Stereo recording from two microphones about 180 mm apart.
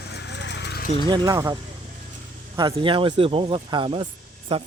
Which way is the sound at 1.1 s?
20° right (ahead or behind).